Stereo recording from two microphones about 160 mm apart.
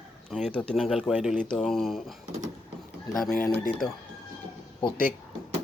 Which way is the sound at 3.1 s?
Centre (ahead or behind).